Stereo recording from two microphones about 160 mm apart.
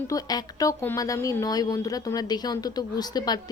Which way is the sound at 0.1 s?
25° left (ahead or behind).